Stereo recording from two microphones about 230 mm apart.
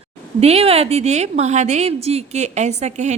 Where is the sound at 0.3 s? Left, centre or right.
Right.